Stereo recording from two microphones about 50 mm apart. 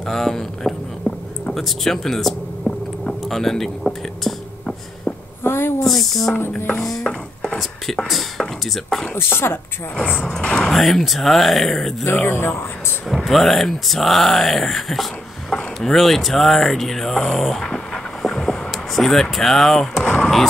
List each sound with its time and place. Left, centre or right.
0.0 s a sound: centre
3.3 s speech: centre
5.4 s speech: left
5.9 s speech: centre
7.0 s dishes: centre
7.5 s a sound: centre
9.1 s speech: left
10.1 s speech: centre
12.3 s speech: left
13.2 s speech: centre
17.7 s a sound: centre
18.7 s speech: centre
20.0 s a sound: centre